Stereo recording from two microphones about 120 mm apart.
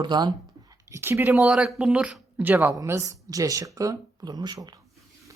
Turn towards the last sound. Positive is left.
turn(degrees=-35)  # may be behind; listen again after turning